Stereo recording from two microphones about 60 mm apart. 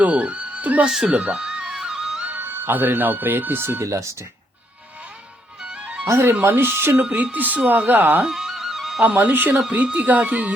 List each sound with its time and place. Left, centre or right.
0.0 s speech: right
1.0 s music: right
2.2 s speech: right
3.8 s speech: right
5.6 s music: right
6.1 s speech: right
7.1 s speech: right
8.2 s music: centre
9.0 s speech: right